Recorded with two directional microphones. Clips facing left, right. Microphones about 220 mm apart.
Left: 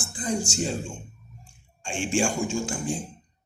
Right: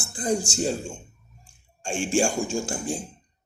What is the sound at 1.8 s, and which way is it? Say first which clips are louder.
Speech: right 2 dB; 45° right (ahead or behind).